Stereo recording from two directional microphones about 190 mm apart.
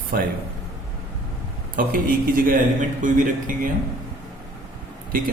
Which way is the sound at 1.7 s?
45° right (ahead or behind).